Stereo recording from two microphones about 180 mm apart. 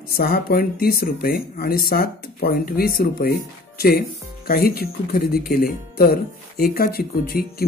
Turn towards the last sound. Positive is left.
turn(degrees=55)  # may be behind; listen again after turning